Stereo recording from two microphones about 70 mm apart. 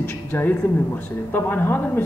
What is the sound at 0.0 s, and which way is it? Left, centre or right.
A woman's voice, left.